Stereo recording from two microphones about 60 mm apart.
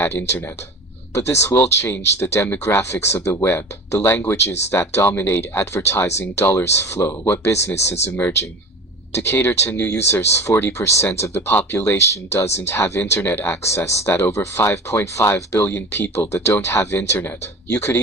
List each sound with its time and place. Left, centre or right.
0.0 s speech: left
3.4 s speech: left
5.4 s speech: left
9.9 s speech: left
12.4 s speech: left
15.5 s speech: left
15.9 s speech: left